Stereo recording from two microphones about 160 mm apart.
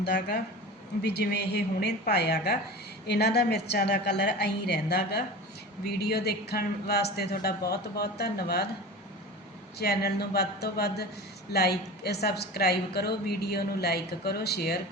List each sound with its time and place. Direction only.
0.0 s a woman's voice: 90° left
6.0 s a woman's voice: 80° left
9.7 s a woman's voice: 80° left